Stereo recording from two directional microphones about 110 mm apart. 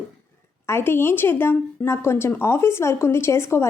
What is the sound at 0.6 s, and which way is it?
A woman's voice, 25° left (ahead or behind).